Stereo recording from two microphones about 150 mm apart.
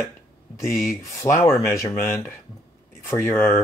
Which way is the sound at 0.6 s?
20° left (ahead or behind).